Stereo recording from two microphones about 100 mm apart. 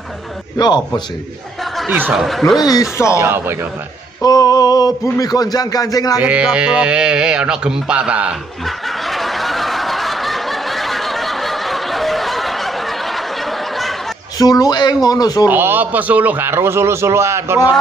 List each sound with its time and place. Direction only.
0.6 s a man's voice: 45° left (ahead or behind)
1.9 s a man's voice: 20° right (ahead or behind)
2.1 s speech: centre (ahead or behind)
2.6 s speech: 35° left (ahead or behind)
3.2 s a man's voice: 20° right (ahead or behind)
4.2 s speech: 40° left (ahead or behind)
6.2 s a man's voice: 10° right (ahead or behind)
8.6 s snicker: centre (ahead or behind)
14.4 s speech: 40° left (ahead or behind)
15.4 s a man's voice: 20° right (ahead or behind)